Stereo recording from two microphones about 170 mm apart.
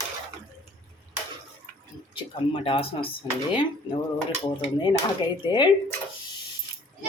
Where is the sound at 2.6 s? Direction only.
30° left (ahead or behind).